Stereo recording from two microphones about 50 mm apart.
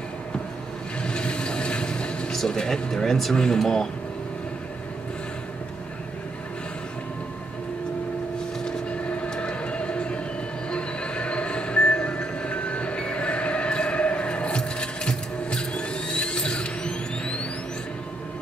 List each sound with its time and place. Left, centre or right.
1.0 s vehicle: centre
2.3 s speech: centre
8.6 s train: centre